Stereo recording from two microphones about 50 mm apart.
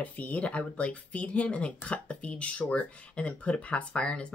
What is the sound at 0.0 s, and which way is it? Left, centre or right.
Speech, left.